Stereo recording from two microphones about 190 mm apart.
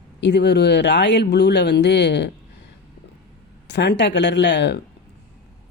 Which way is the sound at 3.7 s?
65° left (ahead or behind).